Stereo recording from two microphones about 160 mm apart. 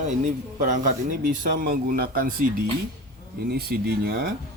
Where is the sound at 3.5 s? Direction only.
75° right (ahead or behind).